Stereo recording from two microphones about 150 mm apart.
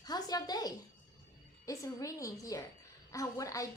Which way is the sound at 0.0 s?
25° left (ahead or behind).